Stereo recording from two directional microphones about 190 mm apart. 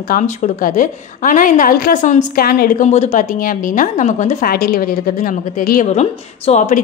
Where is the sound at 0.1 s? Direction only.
40° left (ahead or behind).